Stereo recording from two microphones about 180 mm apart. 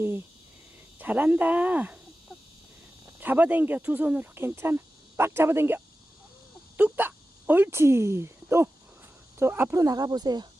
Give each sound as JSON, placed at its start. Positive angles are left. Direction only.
{"t": 0.9, "sound": "speech", "side_deg": -10}
{"t": 3.2, "sound": "speech", "side_deg": -10}
{"t": 6.7, "sound": "a sound", "side_deg": -10}
{"t": 9.4, "sound": "speech", "side_deg": -10}